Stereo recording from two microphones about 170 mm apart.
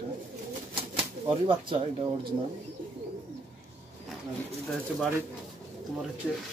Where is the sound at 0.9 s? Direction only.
30° right (ahead or behind).